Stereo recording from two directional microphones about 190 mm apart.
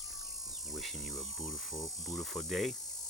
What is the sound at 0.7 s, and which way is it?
Speech, centre (ahead or behind).